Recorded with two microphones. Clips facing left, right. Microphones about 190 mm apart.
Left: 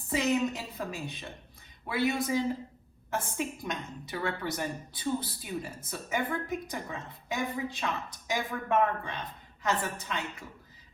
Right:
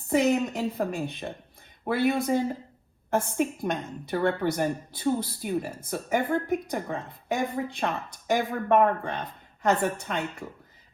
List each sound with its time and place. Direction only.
0.1 s a woman's voice: 55° right (ahead or behind)